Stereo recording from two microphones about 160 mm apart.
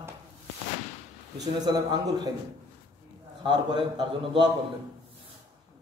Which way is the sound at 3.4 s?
25° right (ahead or behind).